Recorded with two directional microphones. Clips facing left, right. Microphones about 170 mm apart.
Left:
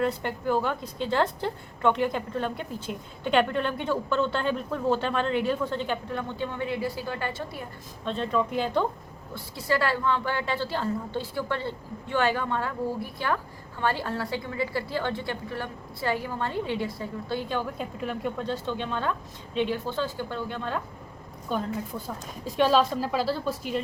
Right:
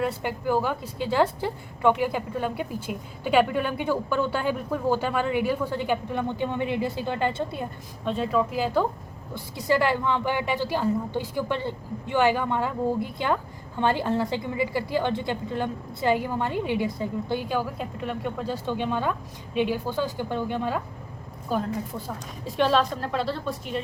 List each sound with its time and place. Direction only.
0.0 s a woman's voice: 10° right (ahead or behind)
8.0 s a woman's voice: 10° right (ahead or behind)
9.3 s a woman's voice: 15° right (ahead or behind)
21.5 s a woman's voice: centre (ahead or behind)